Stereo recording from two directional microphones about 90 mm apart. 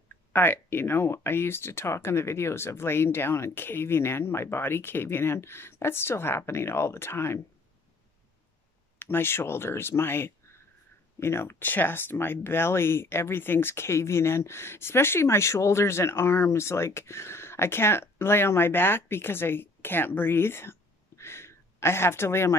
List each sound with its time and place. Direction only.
0.3 s speech: 25° left (ahead or behind)
9.0 s speech: 25° left (ahead or behind)
21.2 s a sound: 30° left (ahead or behind)